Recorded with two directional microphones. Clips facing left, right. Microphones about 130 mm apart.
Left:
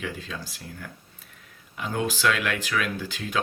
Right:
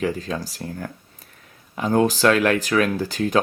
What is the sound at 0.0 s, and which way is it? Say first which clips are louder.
Speech: right 10 dB; 40° right (ahead or behind).